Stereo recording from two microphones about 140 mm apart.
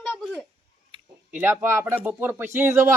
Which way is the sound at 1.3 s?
10° right (ahead or behind).